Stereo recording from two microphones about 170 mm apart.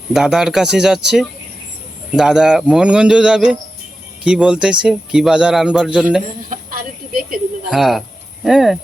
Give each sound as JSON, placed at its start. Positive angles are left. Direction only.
{"t": 0.1, "sound": "a man's voice", "side_deg": -5}
{"t": 6.5, "sound": "a sound", "side_deg": -50}
{"t": 7.7, "sound": "a man's voice", "side_deg": 0}